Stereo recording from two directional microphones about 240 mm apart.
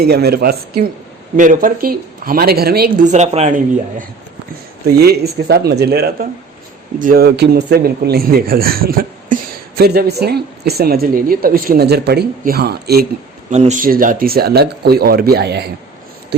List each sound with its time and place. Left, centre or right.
0.0 s a man's voice: right
13.5 s a man's voice: right